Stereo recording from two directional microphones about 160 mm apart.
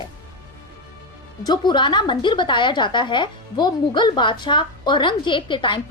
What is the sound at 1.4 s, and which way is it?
A woman's voice, 25° left (ahead or behind).